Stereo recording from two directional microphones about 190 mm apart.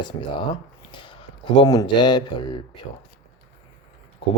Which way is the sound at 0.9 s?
25° left (ahead or behind).